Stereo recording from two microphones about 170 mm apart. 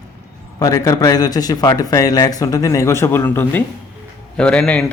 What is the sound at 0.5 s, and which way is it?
A man's voice, 20° left (ahead or behind).